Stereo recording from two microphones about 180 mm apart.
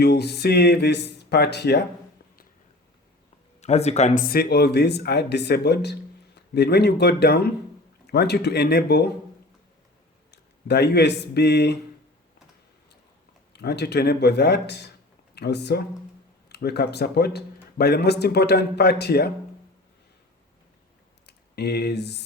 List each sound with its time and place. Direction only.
0.0 s speech: 65° left (ahead or behind)
3.6 s speech: 40° left (ahead or behind); by 9.0 s 65° left (ahead or behind)
10.3 s speech: 65° left (ahead or behind)
13.5 s speech: 65° left (ahead or behind)
21.2 s speech: 65° left (ahead or behind)